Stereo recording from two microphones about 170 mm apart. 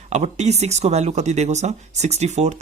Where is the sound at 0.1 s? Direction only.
40° right (ahead or behind).